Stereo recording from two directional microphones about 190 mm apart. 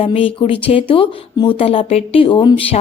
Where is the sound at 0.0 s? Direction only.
30° left (ahead or behind).